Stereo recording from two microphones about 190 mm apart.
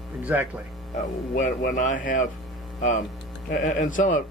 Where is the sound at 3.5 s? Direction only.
45° left (ahead or behind).